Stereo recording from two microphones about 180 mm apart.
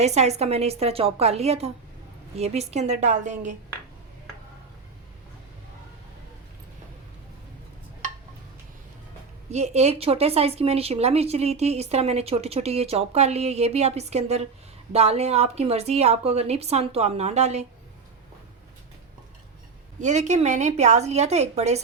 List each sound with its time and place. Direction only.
0.0 s speech: 35° right (ahead or behind)
9.5 s speech: 40° right (ahead or behind)
20.0 s speech: 40° right (ahead or behind)